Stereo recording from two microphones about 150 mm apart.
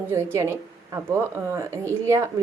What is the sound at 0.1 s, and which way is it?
A woman's voice, 20° right (ahead or behind).